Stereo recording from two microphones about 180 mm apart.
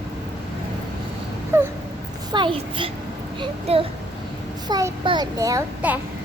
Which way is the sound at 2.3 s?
25° right (ahead or behind).